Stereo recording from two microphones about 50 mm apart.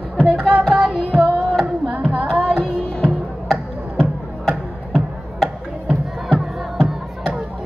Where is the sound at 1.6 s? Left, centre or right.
Right.